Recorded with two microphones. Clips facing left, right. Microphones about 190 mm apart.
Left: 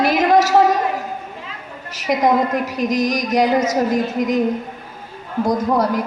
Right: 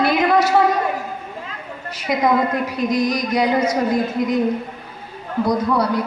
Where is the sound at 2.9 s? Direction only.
90° left.